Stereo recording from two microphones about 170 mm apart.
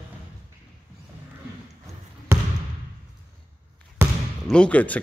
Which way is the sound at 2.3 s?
15° right (ahead or behind).